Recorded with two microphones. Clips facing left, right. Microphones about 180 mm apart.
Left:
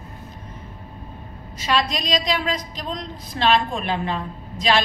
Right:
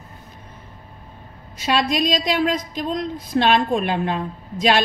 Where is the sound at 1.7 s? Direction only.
50° right (ahead or behind).